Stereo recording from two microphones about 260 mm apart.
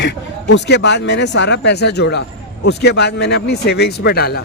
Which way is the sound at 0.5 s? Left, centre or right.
Left.